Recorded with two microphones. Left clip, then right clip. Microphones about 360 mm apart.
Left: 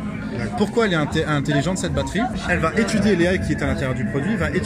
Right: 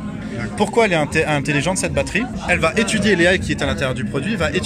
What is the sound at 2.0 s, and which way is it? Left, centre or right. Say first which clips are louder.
A man's voice: right 2 dB; right.